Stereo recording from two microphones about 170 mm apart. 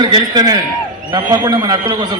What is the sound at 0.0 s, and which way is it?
A man's voice, 25° right (ahead or behind).